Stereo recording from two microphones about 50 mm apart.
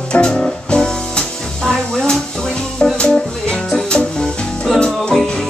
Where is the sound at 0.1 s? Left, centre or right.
Centre.